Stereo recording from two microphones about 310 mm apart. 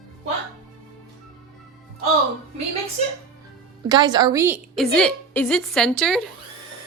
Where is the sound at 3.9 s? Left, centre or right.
Centre.